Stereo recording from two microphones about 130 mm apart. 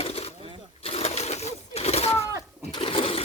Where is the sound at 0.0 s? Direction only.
50° left (ahead or behind).